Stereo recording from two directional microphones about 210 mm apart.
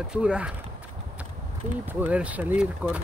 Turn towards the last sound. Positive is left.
turn(degrees=-5)  # may be behind; listen again after turning